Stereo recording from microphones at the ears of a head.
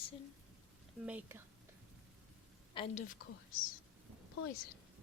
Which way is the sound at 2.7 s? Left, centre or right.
Left.